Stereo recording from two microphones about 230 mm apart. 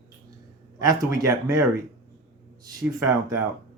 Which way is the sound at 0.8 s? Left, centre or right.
Centre.